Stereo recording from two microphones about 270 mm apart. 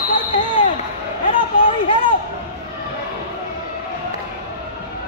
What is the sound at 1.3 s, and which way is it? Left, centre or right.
Run, centre.